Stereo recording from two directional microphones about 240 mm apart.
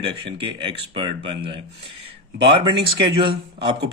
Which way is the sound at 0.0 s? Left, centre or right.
Right.